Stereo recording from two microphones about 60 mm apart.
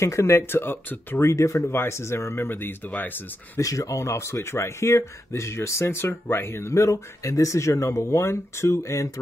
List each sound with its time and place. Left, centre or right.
0.0 s speech: left
1.2 s speech: left
3.5 s speech: left